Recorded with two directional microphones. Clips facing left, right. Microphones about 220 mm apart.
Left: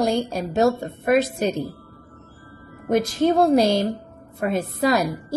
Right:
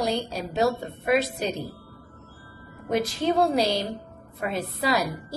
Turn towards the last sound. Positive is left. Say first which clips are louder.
# left 5 dB
turn(degrees=45)  # may be behind; listen again after turning